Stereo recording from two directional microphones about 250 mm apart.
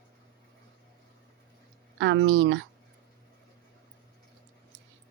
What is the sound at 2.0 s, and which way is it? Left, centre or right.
Speech, right.